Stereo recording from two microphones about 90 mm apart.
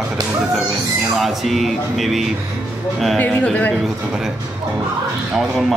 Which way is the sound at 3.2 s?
15° left (ahead or behind).